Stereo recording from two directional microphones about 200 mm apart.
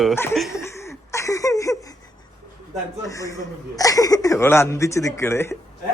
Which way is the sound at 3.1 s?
15° left (ahead or behind).